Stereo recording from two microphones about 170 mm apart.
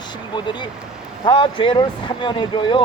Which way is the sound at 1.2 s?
30° left (ahead or behind).